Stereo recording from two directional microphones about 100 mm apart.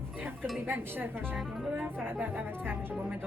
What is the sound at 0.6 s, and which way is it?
Speech, 20° right (ahead or behind).